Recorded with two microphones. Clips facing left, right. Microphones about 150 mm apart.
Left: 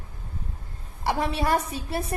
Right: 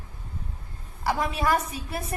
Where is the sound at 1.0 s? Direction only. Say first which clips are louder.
Left 1 dB; 30° left (ahead or behind).